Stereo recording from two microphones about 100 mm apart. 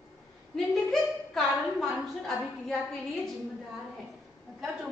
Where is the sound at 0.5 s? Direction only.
Centre (ahead or behind).